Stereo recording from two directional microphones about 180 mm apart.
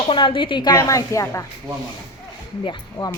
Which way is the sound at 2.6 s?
25° left (ahead or behind).